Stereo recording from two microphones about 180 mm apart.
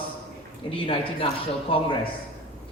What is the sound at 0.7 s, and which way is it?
A man's voice, 30° left (ahead or behind).